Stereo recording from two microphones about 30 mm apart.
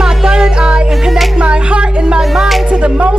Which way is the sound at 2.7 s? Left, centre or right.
Right.